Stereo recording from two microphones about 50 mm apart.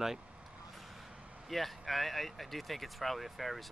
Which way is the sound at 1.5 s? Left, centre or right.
Centre.